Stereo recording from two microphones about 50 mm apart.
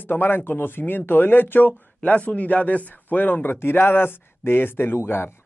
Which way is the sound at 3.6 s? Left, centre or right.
Left.